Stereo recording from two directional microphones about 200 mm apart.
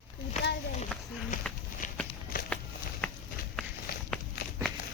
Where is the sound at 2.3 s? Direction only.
45° left (ahead or behind).